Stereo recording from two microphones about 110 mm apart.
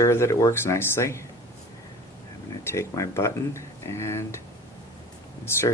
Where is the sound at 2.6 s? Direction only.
25° left (ahead or behind).